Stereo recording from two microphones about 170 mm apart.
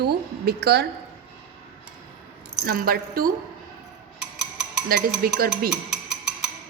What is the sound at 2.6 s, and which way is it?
Speech, 60° right (ahead or behind).